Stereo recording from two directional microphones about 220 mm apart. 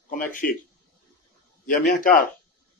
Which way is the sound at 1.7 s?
40° left (ahead or behind).